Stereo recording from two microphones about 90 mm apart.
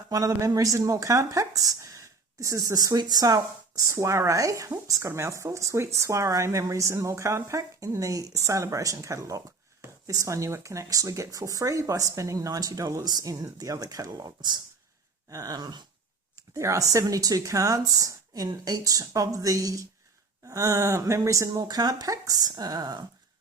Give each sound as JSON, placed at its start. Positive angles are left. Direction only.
{"t": 0.1, "sound": "speech", "side_deg": -40}
{"t": 3.8, "sound": "speech", "side_deg": -35}
{"t": 16.6, "sound": "speech", "side_deg": -35}
{"t": 21.6, "sound": "speech", "side_deg": -45}